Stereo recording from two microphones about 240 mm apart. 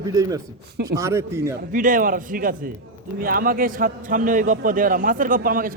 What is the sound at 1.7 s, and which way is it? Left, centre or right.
A man's voice, right.